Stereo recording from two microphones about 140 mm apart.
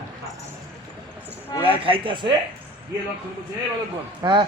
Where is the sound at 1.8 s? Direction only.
40° right (ahead or behind).